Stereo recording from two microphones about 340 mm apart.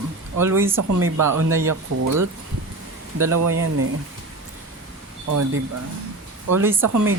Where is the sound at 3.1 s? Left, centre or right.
Right.